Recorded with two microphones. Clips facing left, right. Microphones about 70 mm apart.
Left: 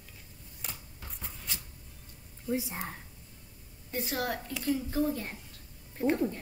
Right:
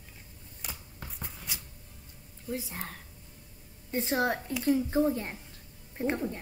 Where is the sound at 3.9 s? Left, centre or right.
Right.